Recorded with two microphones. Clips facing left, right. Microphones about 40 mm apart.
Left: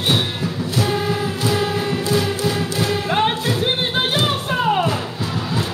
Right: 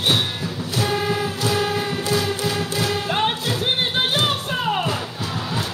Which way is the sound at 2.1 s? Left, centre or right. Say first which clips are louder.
Left 2 dB; centre.